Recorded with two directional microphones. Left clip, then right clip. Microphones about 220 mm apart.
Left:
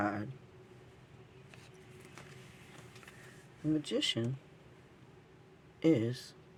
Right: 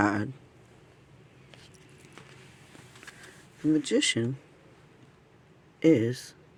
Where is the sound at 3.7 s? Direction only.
40° right (ahead or behind).